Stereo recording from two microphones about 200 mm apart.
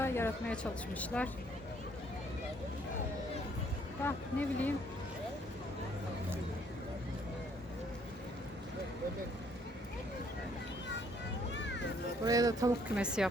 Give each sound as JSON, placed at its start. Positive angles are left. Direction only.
{"t": 0.0, "sound": "speech", "side_deg": 10}
{"t": 4.0, "sound": "speech", "side_deg": 10}
{"t": 12.2, "sound": "speech", "side_deg": -15}
{"t": 13.0, "sound": "a woman's voice", "side_deg": -5}